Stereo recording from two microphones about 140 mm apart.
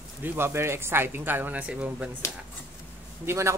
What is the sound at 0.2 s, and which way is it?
Speech, 15° right (ahead or behind).